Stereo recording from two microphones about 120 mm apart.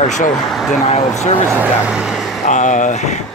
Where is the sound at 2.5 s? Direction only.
85° left.